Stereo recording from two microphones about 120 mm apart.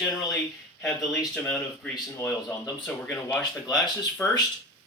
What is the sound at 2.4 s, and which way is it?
Speech, 10° left (ahead or behind).